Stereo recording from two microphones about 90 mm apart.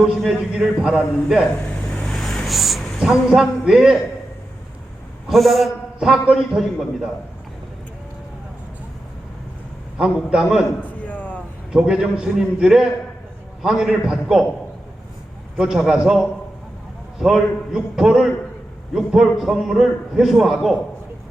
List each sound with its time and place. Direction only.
0.0 s a man's voice: 5° right (ahead or behind)
1.6 s a sound: 10° left (ahead or behind); by 3.9 s 5° right (ahead or behind)
5.3 s a man's voice: centre (ahead or behind)
10.0 s a man's voice: 5° right (ahead or behind)
10.8 s a sound: 15° left (ahead or behind)
11.7 s a man's voice: 5° right (ahead or behind)
15.5 s a man's voice: 5° right (ahead or behind)